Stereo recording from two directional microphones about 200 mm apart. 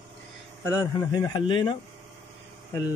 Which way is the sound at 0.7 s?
20° left (ahead or behind).